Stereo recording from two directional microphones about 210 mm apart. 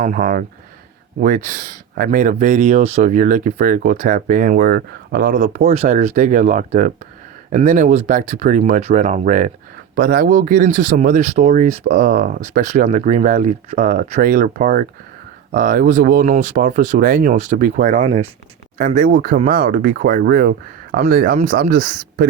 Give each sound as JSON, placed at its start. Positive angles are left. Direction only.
{"t": 0.0, "sound": "speech", "side_deg": -40}
{"t": 1.5, "sound": "speech", "side_deg": -40}